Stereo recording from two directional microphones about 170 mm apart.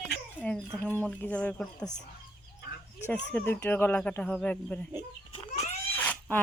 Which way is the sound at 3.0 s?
5° left (ahead or behind).